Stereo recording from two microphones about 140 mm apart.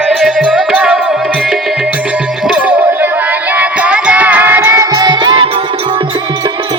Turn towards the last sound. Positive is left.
turn(degrees=-30)  # may be behind; listen again after turning